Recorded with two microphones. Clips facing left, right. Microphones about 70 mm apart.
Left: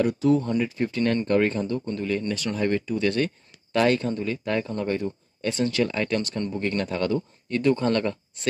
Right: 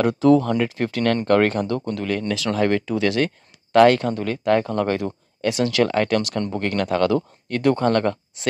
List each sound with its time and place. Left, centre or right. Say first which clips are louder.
0.0 s speech: right 5 dB; right
3.7 s speech: right 7 dB; right